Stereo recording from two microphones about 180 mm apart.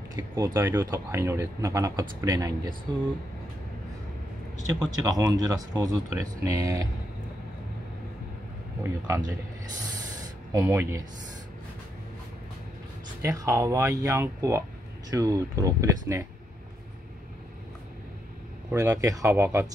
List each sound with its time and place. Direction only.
0.1 s speech: 15° right (ahead or behind)
4.7 s speech: 20° right (ahead or behind)
8.8 s speech: 15° right (ahead or behind)
10.5 s speech: 15° right (ahead or behind)
13.2 s speech: 15° right (ahead or behind)
18.7 s speech: 15° right (ahead or behind)